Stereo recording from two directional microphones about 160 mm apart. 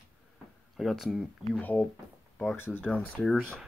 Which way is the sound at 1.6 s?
10° left (ahead or behind).